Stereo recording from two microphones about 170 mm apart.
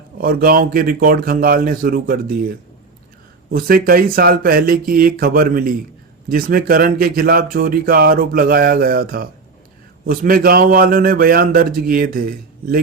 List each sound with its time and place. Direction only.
0.2 s speech: 60° right (ahead or behind)